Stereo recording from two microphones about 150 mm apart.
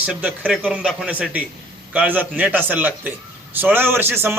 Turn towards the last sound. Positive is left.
turn(degrees=-15)  # may be behind; listen again after turning